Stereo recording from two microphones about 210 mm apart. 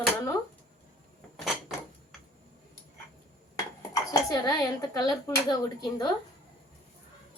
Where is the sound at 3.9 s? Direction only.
15° left (ahead or behind).